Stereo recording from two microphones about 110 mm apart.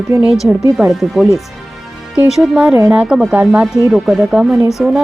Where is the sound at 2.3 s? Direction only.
5° right (ahead or behind).